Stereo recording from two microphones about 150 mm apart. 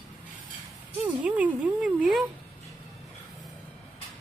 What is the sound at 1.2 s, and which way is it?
Speech, 10° right (ahead or behind).